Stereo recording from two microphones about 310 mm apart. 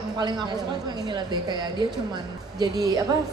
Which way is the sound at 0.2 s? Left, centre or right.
Centre.